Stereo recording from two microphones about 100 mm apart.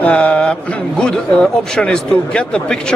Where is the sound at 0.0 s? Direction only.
15° left (ahead or behind).